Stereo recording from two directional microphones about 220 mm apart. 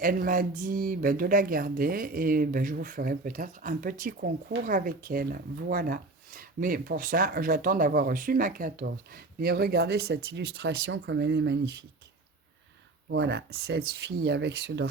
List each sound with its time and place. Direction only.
0.0 s speech: 40° right (ahead or behind)
13.1 s speech: 50° right (ahead or behind)